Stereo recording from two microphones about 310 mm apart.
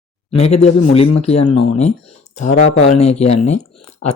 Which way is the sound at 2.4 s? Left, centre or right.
Left.